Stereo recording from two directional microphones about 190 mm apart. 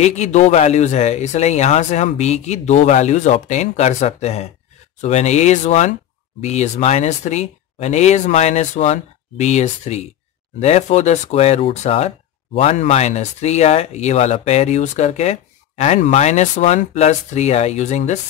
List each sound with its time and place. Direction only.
0.0 s speech: 35° left (ahead or behind)